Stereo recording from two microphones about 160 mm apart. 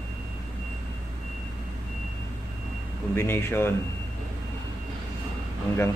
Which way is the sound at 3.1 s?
15° left (ahead or behind).